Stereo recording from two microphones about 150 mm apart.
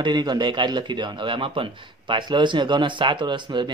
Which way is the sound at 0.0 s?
30° right (ahead or behind).